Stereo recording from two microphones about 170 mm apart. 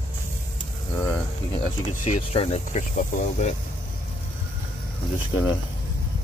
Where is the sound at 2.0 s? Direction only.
35° left (ahead or behind).